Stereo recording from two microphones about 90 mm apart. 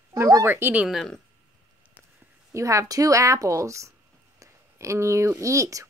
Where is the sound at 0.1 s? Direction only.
40° right (ahead or behind).